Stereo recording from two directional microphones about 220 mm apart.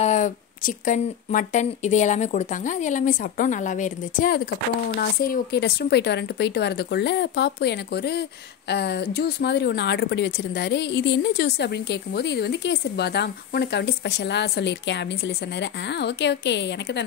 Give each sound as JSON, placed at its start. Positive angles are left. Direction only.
{"t": 0.0, "sound": "speech", "side_deg": 35}